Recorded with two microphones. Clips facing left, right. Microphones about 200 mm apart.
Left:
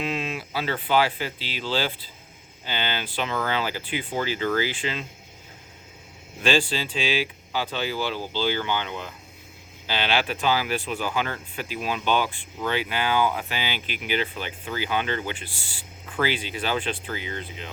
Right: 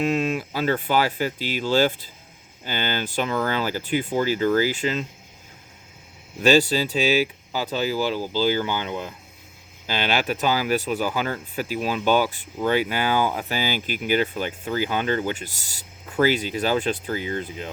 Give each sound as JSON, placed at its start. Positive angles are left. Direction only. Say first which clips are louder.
{"t": 0.0, "sound": "speech", "louder": "right 7 dB", "side_deg": -45}
{"t": 6.4, "sound": "speech", "louder": "right 6 dB", "side_deg": -40}